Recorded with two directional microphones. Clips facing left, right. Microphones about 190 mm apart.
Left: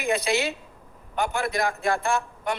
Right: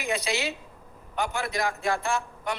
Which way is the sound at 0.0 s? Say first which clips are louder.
Left 4 dB; 55° left (ahead or behind).